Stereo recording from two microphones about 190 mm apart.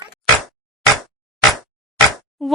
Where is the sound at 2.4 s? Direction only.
Centre (ahead or behind).